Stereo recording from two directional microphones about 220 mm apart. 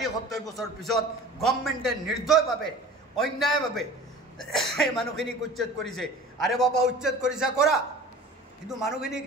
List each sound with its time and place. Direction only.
0.0 s speech: centre (ahead or behind)